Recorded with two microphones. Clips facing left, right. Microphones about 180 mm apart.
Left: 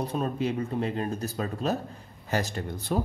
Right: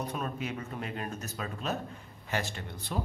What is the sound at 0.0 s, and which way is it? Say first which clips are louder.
Speech: left 7 dB; 30° left (ahead or behind).